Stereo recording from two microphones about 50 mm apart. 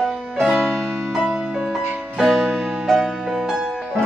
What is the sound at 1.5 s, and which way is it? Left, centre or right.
Music, centre.